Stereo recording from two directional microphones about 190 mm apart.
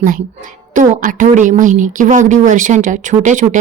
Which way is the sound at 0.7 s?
45° right (ahead or behind).